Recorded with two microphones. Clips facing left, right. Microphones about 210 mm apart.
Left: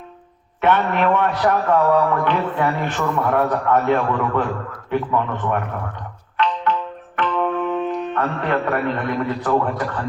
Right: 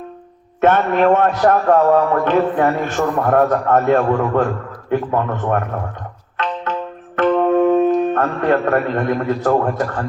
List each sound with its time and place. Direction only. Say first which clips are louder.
0.6 s a man's voice: right 4 dB; 45° right (ahead or behind)
6.7 s music: left 2 dB; 45° right (ahead or behind)
7.2 s speech: right 8 dB; 45° right (ahead or behind)